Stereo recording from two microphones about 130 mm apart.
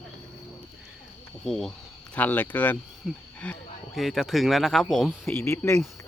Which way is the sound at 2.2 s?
10° left (ahead or behind).